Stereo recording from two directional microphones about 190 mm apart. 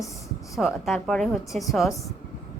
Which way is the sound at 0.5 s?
Centre (ahead or behind).